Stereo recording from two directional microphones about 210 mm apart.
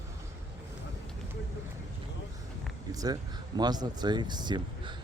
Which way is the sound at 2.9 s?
15° right (ahead or behind).